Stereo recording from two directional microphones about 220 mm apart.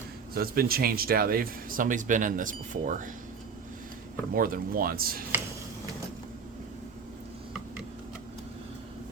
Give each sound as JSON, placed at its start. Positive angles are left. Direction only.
{"t": 0.3, "sound": "speech", "side_deg": -45}
{"t": 4.4, "sound": "speech", "side_deg": -40}